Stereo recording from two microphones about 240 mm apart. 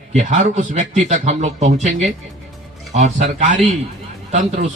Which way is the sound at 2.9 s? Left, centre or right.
Right.